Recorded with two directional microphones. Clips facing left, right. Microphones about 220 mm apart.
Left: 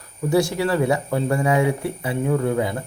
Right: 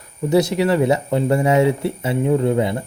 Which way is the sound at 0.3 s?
20° right (ahead or behind).